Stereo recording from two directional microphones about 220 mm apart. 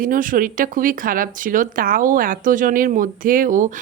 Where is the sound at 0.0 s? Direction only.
40° right (ahead or behind).